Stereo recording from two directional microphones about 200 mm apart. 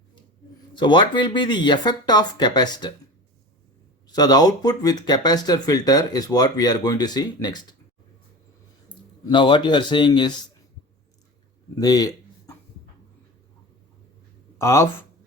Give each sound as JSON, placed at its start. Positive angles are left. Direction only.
{"t": 0.7, "sound": "speech", "side_deg": 25}
{"t": 4.0, "sound": "speech", "side_deg": 20}
{"t": 8.9, "sound": "speech", "side_deg": 25}
{"t": 11.8, "sound": "a sound", "side_deg": 20}
{"t": 14.6, "sound": "speech", "side_deg": 15}